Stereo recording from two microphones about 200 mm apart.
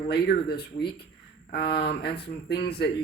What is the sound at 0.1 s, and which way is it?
Speech, 55° left (ahead or behind).